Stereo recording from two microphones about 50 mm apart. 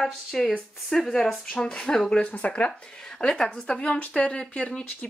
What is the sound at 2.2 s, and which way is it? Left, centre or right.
Speech, left.